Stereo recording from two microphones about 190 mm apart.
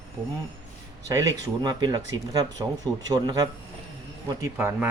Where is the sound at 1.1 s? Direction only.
20° right (ahead or behind).